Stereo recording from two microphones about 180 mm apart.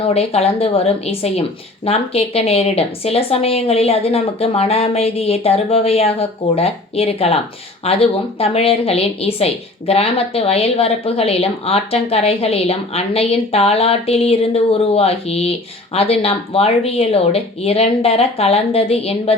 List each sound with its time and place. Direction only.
0.1 s speech: 35° left (ahead or behind)